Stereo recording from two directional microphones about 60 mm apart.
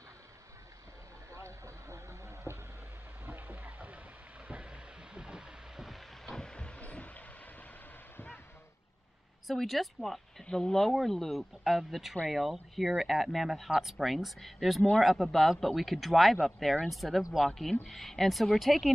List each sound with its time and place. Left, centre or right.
1.3 s vehicle: right
3.3 s music: right
4.5 s a sound: centre; by 7.2 s left
9.5 s speech: centre
17.8 s speech: centre